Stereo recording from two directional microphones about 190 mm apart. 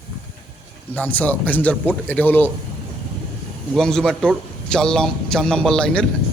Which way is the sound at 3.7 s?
5° left (ahead or behind).